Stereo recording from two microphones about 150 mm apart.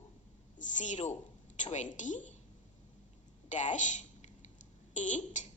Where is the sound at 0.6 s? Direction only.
55° left (ahead or behind).